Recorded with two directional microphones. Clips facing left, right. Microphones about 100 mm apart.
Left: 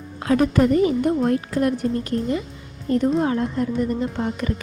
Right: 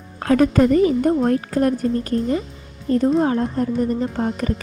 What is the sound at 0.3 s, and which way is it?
A woman's voice, 45° right (ahead or behind).